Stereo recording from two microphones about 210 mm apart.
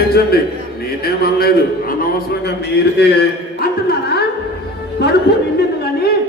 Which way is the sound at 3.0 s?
55° left (ahead or behind).